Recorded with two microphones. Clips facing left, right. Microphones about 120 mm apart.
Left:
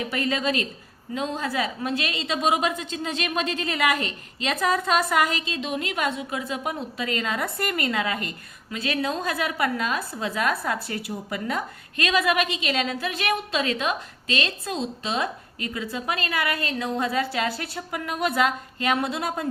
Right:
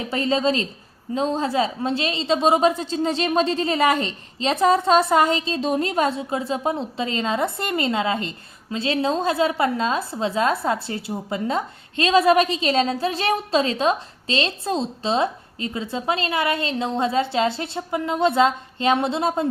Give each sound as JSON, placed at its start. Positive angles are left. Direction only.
{"t": 0.1, "sound": "a woman's voice", "side_deg": -30}